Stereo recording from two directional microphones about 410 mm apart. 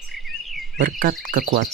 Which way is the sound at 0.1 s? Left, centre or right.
Centre.